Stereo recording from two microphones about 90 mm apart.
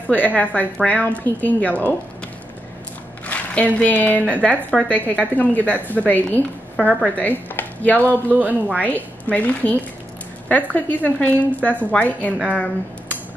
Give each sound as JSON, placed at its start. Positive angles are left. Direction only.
{"t": 0.0, "sound": "speech", "side_deg": 20}
{"t": 3.7, "sound": "speech", "side_deg": 20}